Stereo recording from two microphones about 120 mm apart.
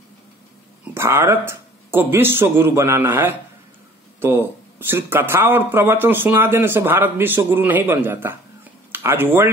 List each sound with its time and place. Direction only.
0.9 s speech: 20° right (ahead or behind)